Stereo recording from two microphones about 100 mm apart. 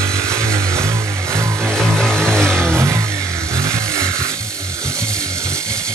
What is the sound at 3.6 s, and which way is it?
Chainsaw, 30° right (ahead or behind).